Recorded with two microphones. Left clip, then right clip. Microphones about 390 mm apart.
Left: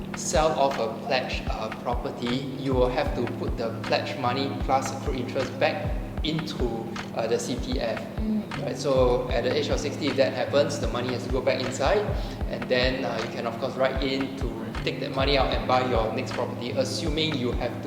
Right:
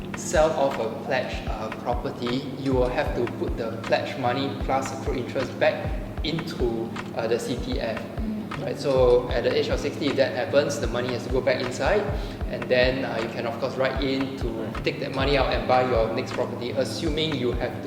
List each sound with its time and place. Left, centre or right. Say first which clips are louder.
0.3 s speech: right 2 dB; centre
1.9 s speech: right 2 dB; centre
7.2 s speech: right 1 dB; centre